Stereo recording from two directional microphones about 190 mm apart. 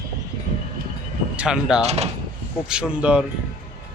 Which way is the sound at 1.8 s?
35° right (ahead or behind).